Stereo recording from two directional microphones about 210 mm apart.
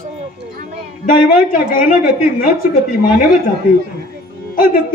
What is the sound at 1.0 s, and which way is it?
A man's voice, 40° left (ahead or behind).